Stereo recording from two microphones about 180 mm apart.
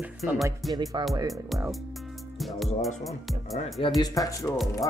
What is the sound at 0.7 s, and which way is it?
Speech, 25° right (ahead or behind).